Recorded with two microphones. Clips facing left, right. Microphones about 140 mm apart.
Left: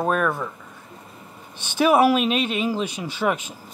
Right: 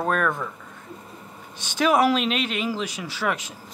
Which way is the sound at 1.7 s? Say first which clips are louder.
Left 3 dB; 10° left (ahead or behind).